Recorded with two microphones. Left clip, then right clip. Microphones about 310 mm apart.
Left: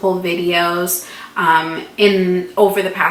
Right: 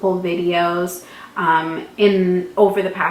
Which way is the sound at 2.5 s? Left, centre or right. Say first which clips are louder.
Left 2 dB; right.